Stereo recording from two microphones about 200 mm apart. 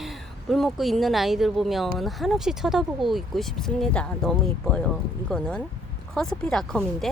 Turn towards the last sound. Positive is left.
turn(degrees=0)  # may be behind; listen again after turning